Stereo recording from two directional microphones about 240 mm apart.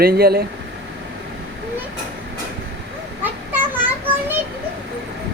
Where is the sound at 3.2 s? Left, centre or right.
Centre.